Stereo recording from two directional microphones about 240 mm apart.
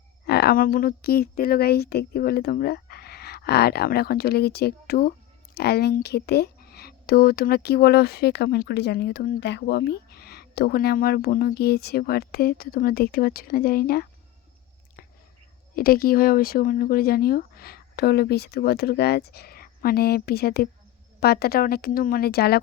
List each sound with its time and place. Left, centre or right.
0.3 s speech: left
15.0 s chewing: left
15.7 s speech: left